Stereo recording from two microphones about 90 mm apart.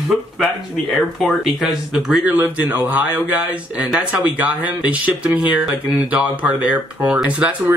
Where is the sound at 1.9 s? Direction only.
10° right (ahead or behind).